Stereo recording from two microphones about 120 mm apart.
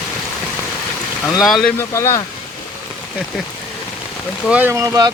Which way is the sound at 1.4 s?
Centre (ahead or behind).